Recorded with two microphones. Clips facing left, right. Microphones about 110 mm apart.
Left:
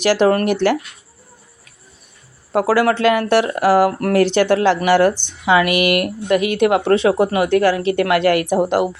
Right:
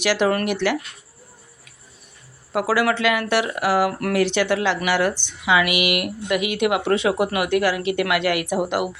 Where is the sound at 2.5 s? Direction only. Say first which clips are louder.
Left 5 dB; 40° left (ahead or behind).